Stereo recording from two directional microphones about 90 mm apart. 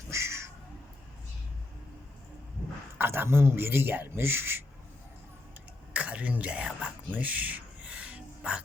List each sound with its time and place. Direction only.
0.1 s cat: 30° right (ahead or behind)
3.0 s speech: 25° right (ahead or behind)
5.9 s speech: 15° right (ahead or behind)
7.1 s a sound: 20° right (ahead or behind)